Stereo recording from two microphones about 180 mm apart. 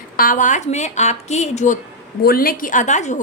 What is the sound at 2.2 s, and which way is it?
Speech, 55° left (ahead or behind).